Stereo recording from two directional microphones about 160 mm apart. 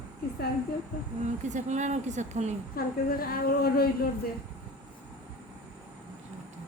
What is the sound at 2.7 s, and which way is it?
A woman's voice, 70° left (ahead or behind).